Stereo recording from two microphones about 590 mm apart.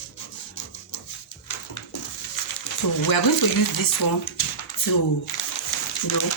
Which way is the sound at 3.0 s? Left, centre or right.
Left.